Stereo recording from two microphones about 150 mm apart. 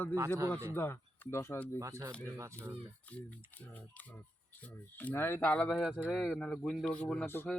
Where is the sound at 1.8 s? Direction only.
20° right (ahead or behind).